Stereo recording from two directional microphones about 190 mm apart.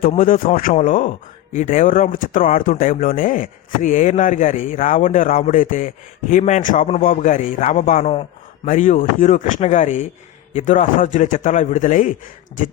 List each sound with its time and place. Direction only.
0.2 s a man's voice: 45° left (ahead or behind)